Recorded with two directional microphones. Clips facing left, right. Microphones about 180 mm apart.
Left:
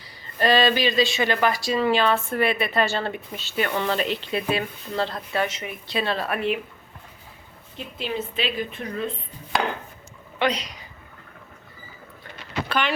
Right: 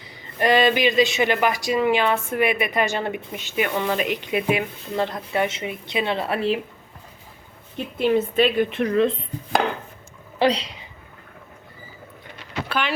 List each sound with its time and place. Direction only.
0.0 s speech: 20° right (ahead or behind)
7.9 s a woman's voice: 55° right (ahead or behind)
8.7 s a woman's voice: 90° right
10.3 s a woman's voice: 30° right (ahead or behind)
12.6 s vehicle: 5° right (ahead or behind)